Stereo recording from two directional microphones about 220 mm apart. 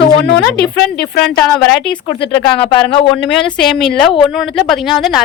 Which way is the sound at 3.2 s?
Centre (ahead or behind).